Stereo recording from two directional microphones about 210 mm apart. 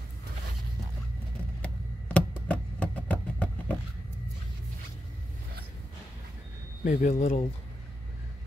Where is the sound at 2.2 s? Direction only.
5° left (ahead or behind).